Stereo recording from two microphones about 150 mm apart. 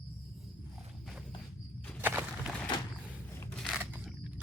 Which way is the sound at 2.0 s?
15° right (ahead or behind).